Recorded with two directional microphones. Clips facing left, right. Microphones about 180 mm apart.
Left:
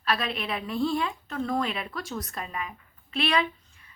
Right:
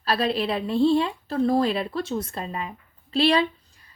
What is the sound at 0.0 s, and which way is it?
A woman's voice, 35° right (ahead or behind).